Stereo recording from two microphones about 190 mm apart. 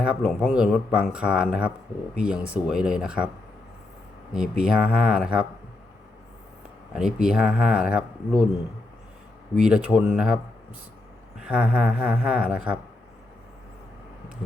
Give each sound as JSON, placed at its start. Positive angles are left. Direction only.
{"t": 0.0, "sound": "speech", "side_deg": 0}
{"t": 4.3, "sound": "speech", "side_deg": -5}
{"t": 6.9, "sound": "speech", "side_deg": -5}
{"t": 9.6, "sound": "speech", "side_deg": -5}
{"t": 11.3, "sound": "speech", "side_deg": -5}